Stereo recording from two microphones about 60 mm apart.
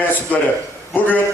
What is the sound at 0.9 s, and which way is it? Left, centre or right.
Speech, left.